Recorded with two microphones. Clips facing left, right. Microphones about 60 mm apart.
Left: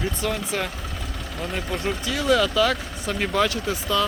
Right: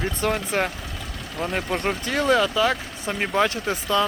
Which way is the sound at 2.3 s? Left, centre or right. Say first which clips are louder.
Even; right.